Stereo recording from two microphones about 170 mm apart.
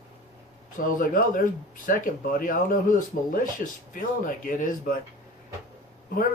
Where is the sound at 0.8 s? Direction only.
55° left (ahead or behind).